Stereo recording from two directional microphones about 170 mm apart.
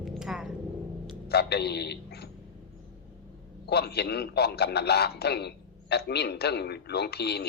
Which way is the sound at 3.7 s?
70° left (ahead or behind).